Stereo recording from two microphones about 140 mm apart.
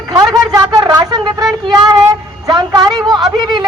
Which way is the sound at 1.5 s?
30° right (ahead or behind).